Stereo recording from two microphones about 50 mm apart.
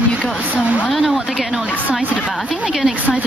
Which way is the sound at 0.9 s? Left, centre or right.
Centre.